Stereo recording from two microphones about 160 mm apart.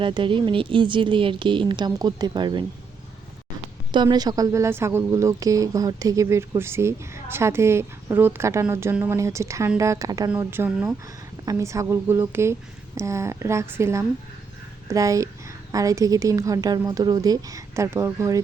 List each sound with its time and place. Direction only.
0.0 s speech: 30° right (ahead or behind)
3.9 s a woman's voice: 25° right (ahead or behind)
10.3 s a woman's voice: 10° right (ahead or behind)